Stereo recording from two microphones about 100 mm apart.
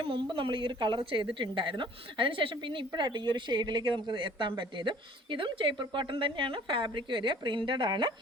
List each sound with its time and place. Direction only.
0.1 s a woman's voice: 55° right (ahead or behind)